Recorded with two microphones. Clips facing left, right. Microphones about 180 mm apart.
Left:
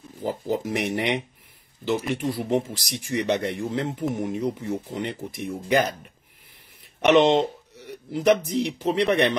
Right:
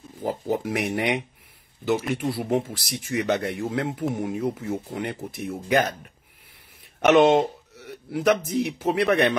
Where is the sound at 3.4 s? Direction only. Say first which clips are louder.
Even; 5° right (ahead or behind).